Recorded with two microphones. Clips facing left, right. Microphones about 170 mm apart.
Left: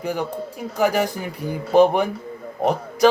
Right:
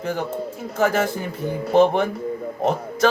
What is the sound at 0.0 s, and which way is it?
Speech, 15° left (ahead or behind).